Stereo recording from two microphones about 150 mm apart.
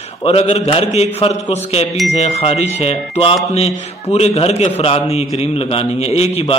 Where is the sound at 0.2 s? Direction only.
45° left (ahead or behind).